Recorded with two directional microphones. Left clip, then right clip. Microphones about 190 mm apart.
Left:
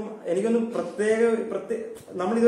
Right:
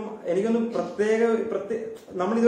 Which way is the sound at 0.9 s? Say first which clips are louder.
Even; 15° left (ahead or behind).